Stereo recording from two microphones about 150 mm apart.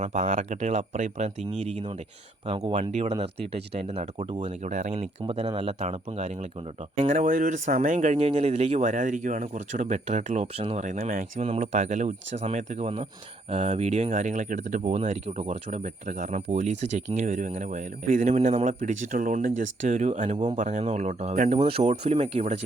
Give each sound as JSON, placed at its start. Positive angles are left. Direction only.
{"t": 0.0, "sound": "speech", "side_deg": -60}
{"t": 5.2, "sound": "speech", "side_deg": -40}
{"t": 7.1, "sound": "speech", "side_deg": -60}